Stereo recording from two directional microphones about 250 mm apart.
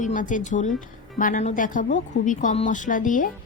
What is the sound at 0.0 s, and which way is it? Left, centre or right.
A woman's voice, left.